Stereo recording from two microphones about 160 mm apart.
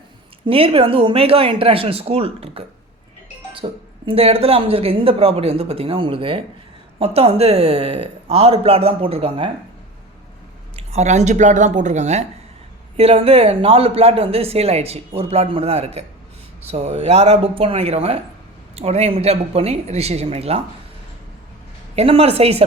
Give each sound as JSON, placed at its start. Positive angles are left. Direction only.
{"t": 0.4, "sound": "speech", "side_deg": -35}
{"t": 10.8, "sound": "speech", "side_deg": -45}
{"t": 21.9, "sound": "speech", "side_deg": -40}